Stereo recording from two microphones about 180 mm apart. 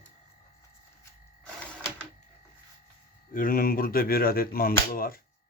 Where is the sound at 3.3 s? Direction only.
50° left (ahead or behind).